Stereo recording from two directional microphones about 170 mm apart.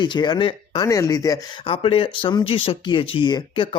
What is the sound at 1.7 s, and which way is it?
Speech, 30° left (ahead or behind).